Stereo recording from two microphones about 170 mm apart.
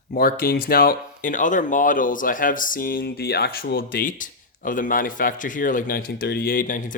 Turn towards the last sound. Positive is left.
turn(degrees=50)  # may be behind; listen again after turning